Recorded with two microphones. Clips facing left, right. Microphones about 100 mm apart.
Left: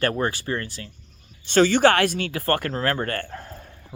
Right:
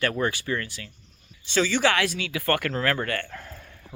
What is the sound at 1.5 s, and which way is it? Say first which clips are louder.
Speech: left 6 dB; 55° left (ahead or behind).